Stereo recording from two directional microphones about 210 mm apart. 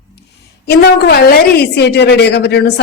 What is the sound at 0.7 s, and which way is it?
A woman's voice, 50° left (ahead or behind).